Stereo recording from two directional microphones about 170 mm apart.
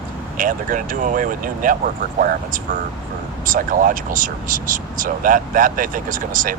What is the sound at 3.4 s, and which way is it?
Speech, 55° right (ahead or behind).